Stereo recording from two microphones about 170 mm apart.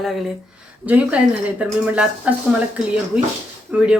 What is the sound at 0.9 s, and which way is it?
A woman's voice, 10° right (ahead or behind).